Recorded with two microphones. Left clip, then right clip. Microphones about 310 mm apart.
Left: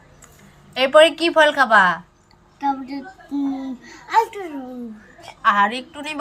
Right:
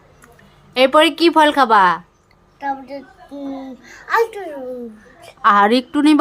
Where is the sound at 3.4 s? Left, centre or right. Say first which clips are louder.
Left 2 dB; centre.